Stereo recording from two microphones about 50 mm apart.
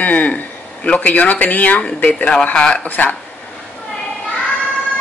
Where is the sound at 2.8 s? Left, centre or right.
Left.